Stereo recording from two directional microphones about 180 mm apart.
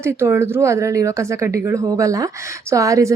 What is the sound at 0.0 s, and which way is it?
A woman's voice, 15° right (ahead or behind).